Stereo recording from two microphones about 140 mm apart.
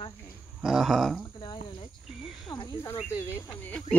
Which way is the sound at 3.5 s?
10° left (ahead or behind).